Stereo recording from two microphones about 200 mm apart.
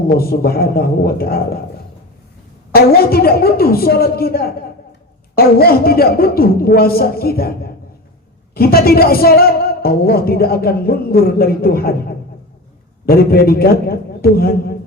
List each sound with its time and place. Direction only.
0.2 s a woman's voice: 50° left (ahead or behind)
2.7 s a woman's voice: 50° left (ahead or behind)